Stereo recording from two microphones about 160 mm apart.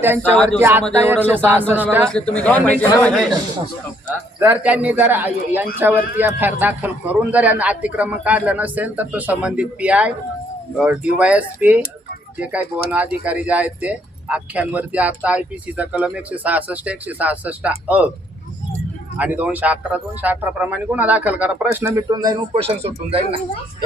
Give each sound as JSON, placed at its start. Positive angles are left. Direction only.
{"t": 0.6, "sound": "speech", "side_deg": -15}
{"t": 2.0, "sound": "a man's voice", "side_deg": 5}
{"t": 4.4, "sound": "speech", "side_deg": -10}
{"t": 19.1, "sound": "speech", "side_deg": -10}